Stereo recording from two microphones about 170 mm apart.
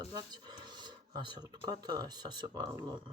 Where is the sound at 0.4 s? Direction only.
25° right (ahead or behind).